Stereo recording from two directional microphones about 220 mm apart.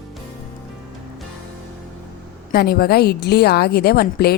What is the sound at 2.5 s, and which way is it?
A woman's voice, 45° left (ahead or behind).